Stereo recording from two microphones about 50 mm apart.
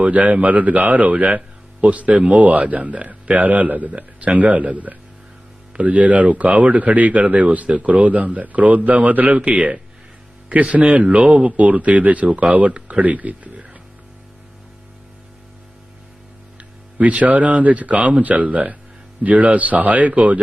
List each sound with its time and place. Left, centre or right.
0.0 s speech: right
17.0 s speech: right